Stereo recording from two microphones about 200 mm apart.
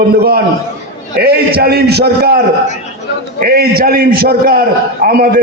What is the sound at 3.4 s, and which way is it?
A man's voice, 50° right (ahead or behind).